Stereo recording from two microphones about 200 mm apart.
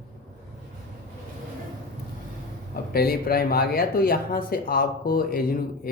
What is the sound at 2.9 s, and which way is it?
A man's voice, 50° left (ahead or behind).